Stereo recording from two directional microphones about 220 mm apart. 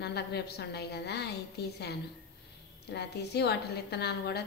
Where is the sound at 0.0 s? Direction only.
50° left (ahead or behind).